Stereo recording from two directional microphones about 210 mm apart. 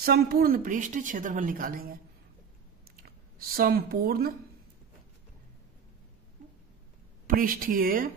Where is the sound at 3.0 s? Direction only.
45° right (ahead or behind).